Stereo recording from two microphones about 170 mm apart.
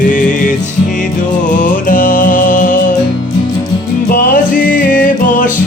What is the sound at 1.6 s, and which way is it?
Music, 55° left (ahead or behind).